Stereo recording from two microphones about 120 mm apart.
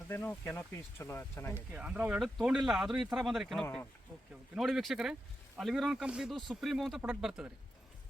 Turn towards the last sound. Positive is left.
turn(degrees=-5)  # may be behind; listen again after turning